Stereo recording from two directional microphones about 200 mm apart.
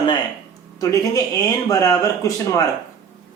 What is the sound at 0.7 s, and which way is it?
Speech, 15° left (ahead or behind).